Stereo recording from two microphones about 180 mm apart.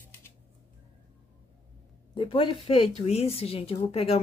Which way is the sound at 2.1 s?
30° left (ahead or behind).